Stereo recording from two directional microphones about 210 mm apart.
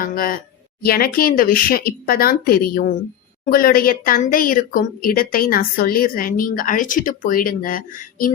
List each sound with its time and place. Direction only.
0.0 s speech: 40° left (ahead or behind)